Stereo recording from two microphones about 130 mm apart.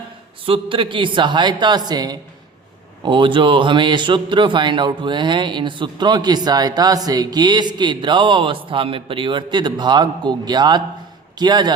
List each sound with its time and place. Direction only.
0.4 s a man's voice: 45° right (ahead or behind)